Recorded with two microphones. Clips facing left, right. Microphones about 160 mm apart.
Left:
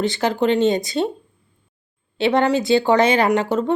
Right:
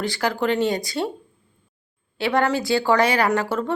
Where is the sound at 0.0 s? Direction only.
20° left (ahead or behind).